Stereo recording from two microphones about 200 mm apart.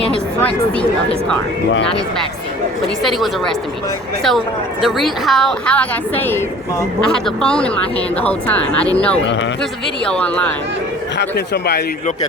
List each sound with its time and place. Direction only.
0.3 s speech: 5° left (ahead or behind)
3.0 s a woman's voice: centre (ahead or behind)
9.2 s a man's voice: 65° left (ahead or behind)
10.1 s speech: 5° left (ahead or behind)
11.2 s a man's voice: 55° left (ahead or behind)